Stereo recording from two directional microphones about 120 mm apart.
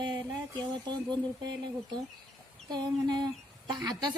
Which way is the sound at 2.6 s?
35° right (ahead or behind).